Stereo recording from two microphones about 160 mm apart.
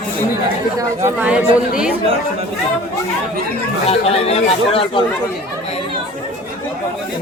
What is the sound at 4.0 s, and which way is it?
Speech, 40° left (ahead or behind).